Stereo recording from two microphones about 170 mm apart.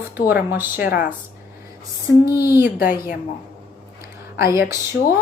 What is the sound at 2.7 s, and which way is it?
Speech, 60° left (ahead or behind).